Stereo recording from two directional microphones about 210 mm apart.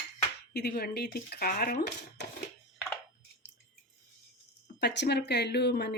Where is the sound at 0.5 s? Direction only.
50° left (ahead or behind).